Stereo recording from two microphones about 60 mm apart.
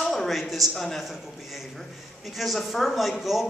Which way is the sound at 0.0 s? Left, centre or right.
Centre.